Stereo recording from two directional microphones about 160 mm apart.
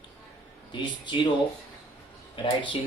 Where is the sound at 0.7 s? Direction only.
30° left (ahead or behind).